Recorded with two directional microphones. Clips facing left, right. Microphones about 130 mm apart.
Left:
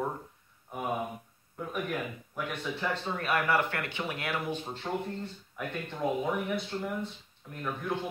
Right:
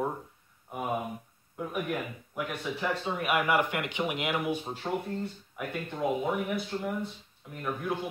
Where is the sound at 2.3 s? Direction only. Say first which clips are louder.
Right 2 dB; 10° right (ahead or behind).